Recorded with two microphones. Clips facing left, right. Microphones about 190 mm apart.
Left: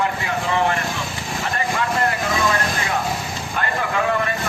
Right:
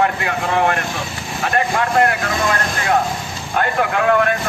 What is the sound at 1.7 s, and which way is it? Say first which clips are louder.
Speech: right 5 dB; 65° right (ahead or behind).